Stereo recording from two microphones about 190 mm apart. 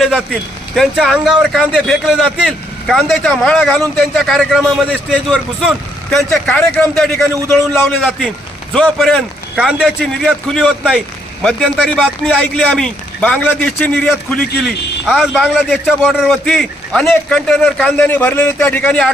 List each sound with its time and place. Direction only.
0.8 s a man's voice: centre (ahead or behind)